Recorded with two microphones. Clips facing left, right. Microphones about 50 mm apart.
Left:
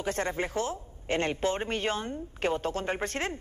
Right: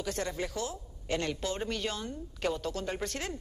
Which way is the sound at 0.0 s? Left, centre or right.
Left.